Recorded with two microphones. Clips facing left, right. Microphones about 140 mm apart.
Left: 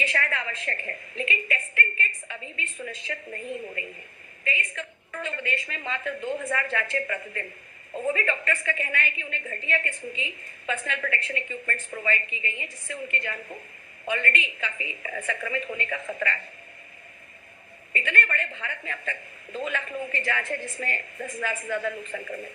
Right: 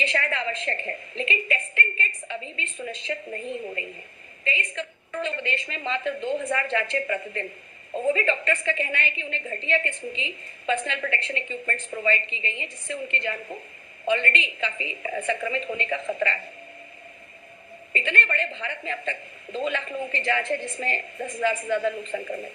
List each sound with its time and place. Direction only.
0.0 s a woman's voice: 25° right (ahead or behind)
17.9 s a woman's voice: 25° right (ahead or behind)